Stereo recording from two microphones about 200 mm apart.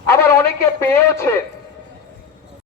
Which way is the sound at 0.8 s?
10° left (ahead or behind).